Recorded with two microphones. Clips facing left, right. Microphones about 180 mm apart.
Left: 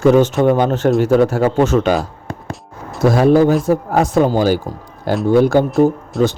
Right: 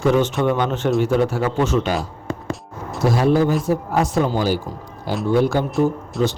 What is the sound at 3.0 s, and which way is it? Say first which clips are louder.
Speech: left 6 dB; 50° left (ahead or behind).